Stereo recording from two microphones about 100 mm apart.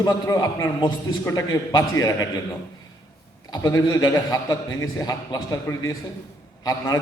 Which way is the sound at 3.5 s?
35° left (ahead or behind).